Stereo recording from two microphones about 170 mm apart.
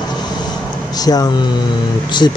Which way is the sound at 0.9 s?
20° left (ahead or behind).